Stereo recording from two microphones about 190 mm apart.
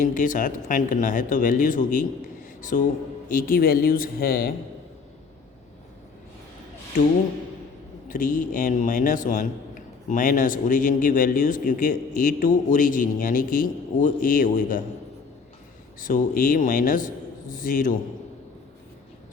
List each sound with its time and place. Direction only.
0.0 s a man's voice: 45° left (ahead or behind)
8.0 s a man's voice: 45° left (ahead or behind)
16.0 s a man's voice: 45° left (ahead or behind)